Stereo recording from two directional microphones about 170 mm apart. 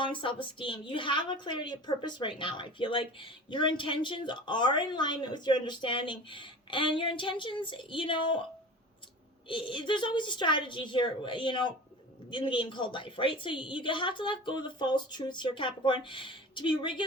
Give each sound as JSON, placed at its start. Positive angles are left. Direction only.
{"t": 0.0, "sound": "a woman's voice", "side_deg": 30}
{"t": 9.5, "sound": "a woman's voice", "side_deg": 30}